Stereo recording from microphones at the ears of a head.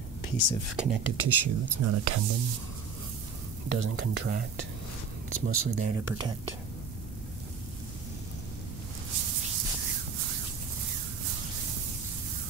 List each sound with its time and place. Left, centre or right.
0.7 s speech: right
3.6 s speech: right
9.1 s a sound: right